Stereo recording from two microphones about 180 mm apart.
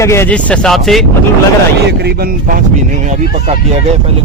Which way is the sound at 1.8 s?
65° right (ahead or behind).